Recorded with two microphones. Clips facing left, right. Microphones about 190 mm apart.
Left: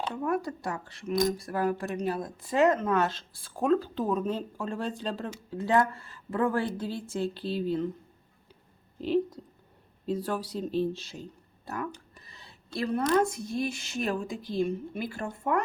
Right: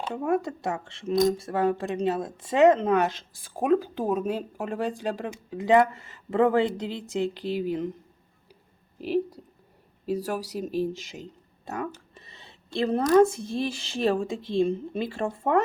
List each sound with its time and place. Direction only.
0.1 s speech: 25° right (ahead or behind)
9.0 s speech: 5° right (ahead or behind)
10.1 s speech: 80° right
10.6 s speech: 10° right (ahead or behind)
10.9 s speech: 90° right
11.2 s a sound: 20° right (ahead or behind)
13.1 s speech: 30° right (ahead or behind)